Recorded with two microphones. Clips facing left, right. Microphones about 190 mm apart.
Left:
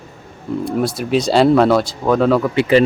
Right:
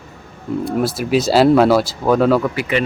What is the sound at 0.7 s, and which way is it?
Speech, 5° right (ahead or behind).